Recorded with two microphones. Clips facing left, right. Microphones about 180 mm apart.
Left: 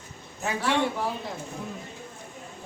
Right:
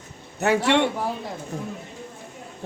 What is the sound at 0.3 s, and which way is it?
Speech, 75° right (ahead or behind).